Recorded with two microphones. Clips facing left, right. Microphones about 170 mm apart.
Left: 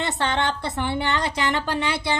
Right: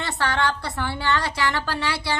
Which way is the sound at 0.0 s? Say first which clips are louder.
Left 1 dB; 20° left (ahead or behind).